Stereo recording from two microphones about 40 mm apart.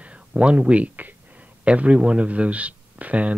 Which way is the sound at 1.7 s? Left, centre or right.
Right.